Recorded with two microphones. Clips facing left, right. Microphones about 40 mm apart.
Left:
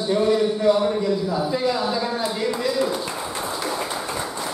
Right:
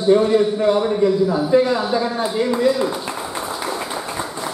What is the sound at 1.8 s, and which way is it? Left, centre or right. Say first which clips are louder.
Speech: right 3 dB; centre.